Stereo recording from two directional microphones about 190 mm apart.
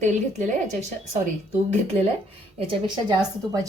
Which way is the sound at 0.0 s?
40° right (ahead or behind).